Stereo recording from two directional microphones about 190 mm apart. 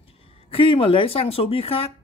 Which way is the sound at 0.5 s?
30° left (ahead or behind).